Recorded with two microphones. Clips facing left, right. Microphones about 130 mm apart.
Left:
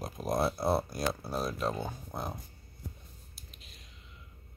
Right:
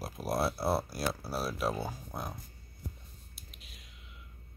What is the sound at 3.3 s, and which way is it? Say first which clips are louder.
Whispering: even; 5° right (ahead or behind).